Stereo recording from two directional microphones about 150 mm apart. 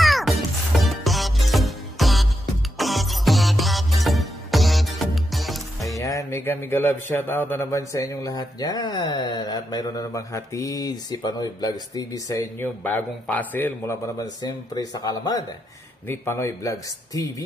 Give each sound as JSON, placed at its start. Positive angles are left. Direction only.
{"t": 0.0, "sound": "music", "side_deg": 0}
{"t": 5.9, "sound": "a man's voice", "side_deg": 20}
{"t": 14.1, "sound": "a man's voice", "side_deg": 25}